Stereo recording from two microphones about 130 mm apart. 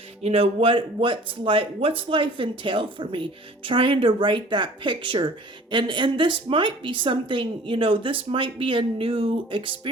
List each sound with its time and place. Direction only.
0.2 s speech: 50° right (ahead or behind)